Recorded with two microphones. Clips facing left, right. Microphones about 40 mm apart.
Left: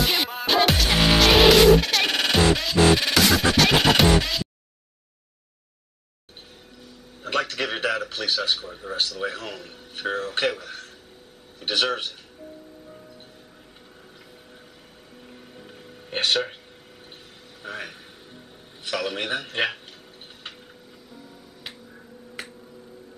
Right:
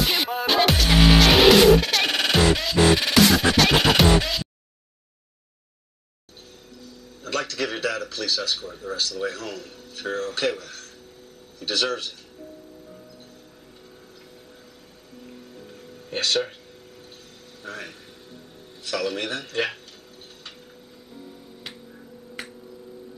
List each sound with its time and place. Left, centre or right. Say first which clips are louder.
0.0 s music: right 1 dB; centre
6.8 s music: left 2 dB; left
8.4 s speech: left 2 dB; centre
15.2 s music: right 2 dB; left
17.6 s speech: left 2 dB; left
22.4 s tick-tock: even; centre